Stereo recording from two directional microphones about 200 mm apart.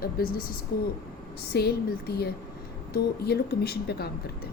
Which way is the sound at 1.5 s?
50° left (ahead or behind).